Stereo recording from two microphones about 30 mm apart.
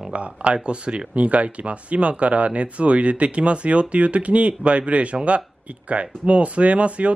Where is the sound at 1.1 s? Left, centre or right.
Right.